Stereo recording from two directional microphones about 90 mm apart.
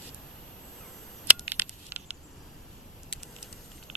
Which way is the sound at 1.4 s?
20° right (ahead or behind).